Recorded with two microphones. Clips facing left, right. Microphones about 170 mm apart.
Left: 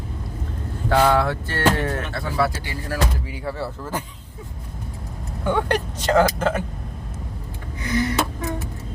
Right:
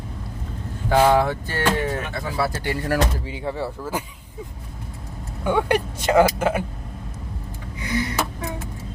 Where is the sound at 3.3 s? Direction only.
15° right (ahead or behind).